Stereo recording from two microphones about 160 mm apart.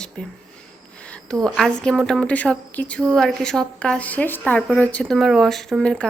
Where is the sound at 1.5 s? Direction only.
5° left (ahead or behind).